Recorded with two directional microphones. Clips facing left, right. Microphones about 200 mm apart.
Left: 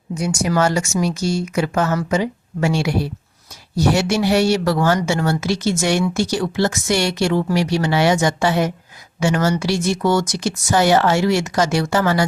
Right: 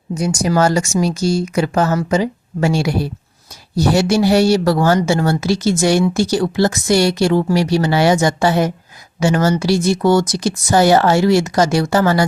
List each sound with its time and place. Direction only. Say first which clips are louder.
0.1 s speech: right 3 dB; 35° right (ahead or behind)